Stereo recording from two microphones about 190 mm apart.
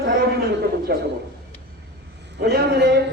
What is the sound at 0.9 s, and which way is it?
Speech, 55° right (ahead or behind).